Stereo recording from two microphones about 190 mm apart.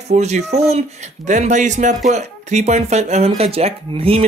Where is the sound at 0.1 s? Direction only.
35° right (ahead or behind).